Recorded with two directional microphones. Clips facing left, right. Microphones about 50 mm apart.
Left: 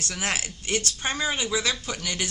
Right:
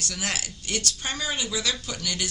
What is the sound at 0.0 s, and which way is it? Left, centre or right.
Speech, left.